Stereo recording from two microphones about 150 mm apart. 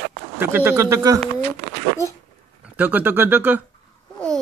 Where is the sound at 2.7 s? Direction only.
10° right (ahead or behind).